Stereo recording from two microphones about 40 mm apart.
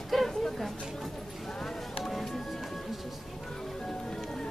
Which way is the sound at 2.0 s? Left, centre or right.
Centre.